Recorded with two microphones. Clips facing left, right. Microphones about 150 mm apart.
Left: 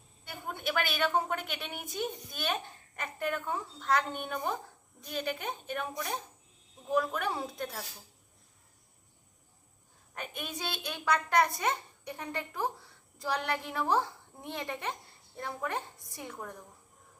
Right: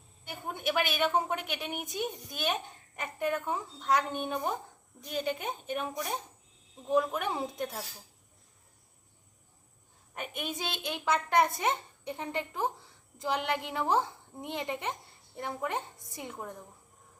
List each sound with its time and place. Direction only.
0.3 s a woman's voice: 20° right (ahead or behind)
6.9 s a woman's voice: 20° right (ahead or behind)
10.2 s a woman's voice: 20° right (ahead or behind)